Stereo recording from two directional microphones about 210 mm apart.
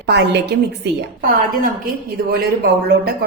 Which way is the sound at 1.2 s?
40° right (ahead or behind).